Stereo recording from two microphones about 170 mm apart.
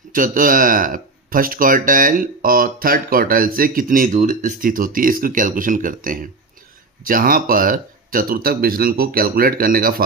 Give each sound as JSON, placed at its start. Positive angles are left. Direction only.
{"t": 0.1, "sound": "speech", "side_deg": -55}